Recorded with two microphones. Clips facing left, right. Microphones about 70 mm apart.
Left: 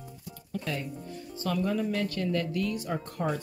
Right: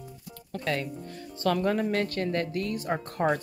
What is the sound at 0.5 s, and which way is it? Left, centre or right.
Speech, right.